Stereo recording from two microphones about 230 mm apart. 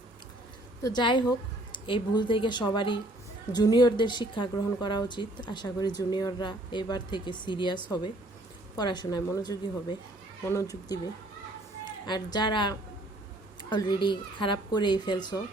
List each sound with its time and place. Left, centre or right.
0.8 s a woman's voice: centre
12.0 s a woman's voice: centre